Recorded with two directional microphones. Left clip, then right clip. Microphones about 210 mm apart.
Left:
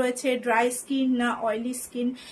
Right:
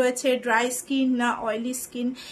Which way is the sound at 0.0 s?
20° right (ahead or behind).